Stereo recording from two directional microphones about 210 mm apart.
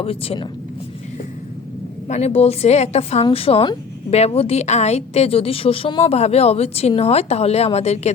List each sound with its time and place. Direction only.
0.0 s a woman's voice: 25° left (ahead or behind)
2.0 s a woman's voice: 30° left (ahead or behind)